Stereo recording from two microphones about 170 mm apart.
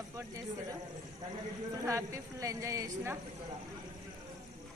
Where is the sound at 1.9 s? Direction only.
15° right (ahead or behind).